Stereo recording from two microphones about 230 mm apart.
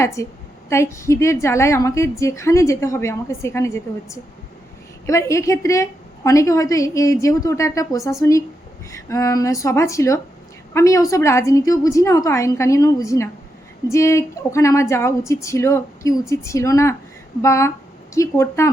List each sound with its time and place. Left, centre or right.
0.2 s a woman's voice: centre